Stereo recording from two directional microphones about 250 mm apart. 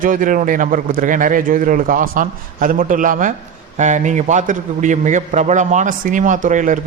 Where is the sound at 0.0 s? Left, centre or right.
Right.